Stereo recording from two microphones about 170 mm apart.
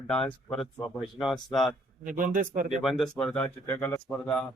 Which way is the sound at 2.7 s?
Centre (ahead or behind).